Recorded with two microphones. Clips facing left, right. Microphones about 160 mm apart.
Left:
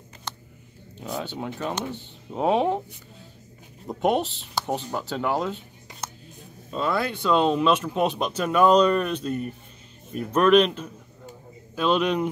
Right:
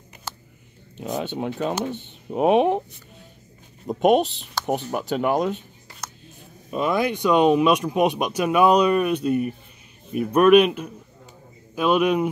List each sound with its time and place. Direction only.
0.3 s a sound: 5° right (ahead or behind)
0.9 s speech: 20° right (ahead or behind)
4.0 s speech: 15° right (ahead or behind)